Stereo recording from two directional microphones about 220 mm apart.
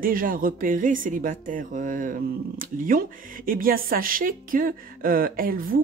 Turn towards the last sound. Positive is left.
turn(degrees=-40)  # may be behind; listen again after turning